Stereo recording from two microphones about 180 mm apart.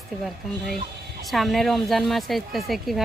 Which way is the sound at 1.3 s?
Centre (ahead or behind).